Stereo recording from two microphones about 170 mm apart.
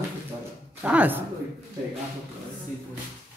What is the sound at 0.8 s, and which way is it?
Speech, 10° right (ahead or behind).